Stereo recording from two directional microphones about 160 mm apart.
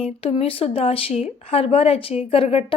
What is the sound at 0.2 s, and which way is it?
Speech, 40° left (ahead or behind).